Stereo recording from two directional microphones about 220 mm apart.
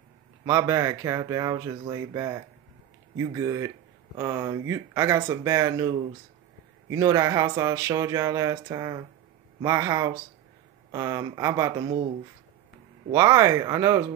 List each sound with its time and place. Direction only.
0.5 s speech: 15° right (ahead or behind)
13.1 s speech: 15° right (ahead or behind)